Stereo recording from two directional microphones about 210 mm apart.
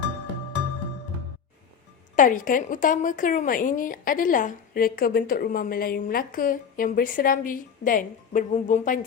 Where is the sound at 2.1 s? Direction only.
40° left (ahead or behind).